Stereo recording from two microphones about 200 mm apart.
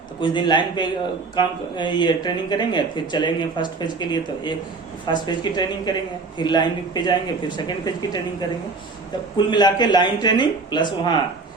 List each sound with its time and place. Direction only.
0.2 s speech: 20° left (ahead or behind)
9.5 s speech: 20° left (ahead or behind)